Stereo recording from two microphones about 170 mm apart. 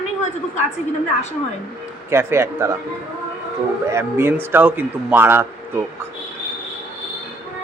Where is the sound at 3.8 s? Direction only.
15° right (ahead or behind).